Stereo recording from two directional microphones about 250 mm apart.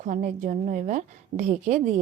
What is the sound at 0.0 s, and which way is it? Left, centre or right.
A woman's voice, right.